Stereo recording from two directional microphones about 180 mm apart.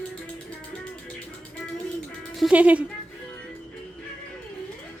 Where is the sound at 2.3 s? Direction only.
5° right (ahead or behind).